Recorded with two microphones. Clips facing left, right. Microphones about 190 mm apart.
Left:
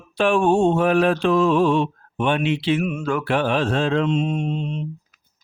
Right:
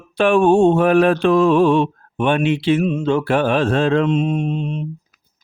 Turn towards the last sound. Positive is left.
turn(degrees=-55)  # may be behind; listen again after turning